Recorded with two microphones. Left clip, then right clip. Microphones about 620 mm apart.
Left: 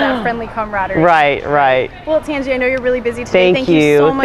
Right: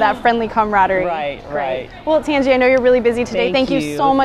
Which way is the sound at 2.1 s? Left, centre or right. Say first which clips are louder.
Right 3 dB; right.